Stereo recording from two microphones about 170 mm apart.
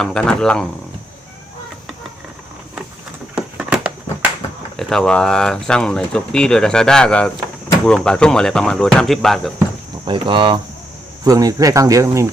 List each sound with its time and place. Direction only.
0.0 s speech: 5° left (ahead or behind)
3.3 s a sound: 5° right (ahead or behind)
4.8 s speech: centre (ahead or behind)
10.1 s speech: 30° right (ahead or behind)